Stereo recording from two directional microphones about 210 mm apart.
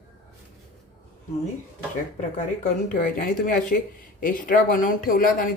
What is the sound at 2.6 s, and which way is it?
Speech, 40° left (ahead or behind).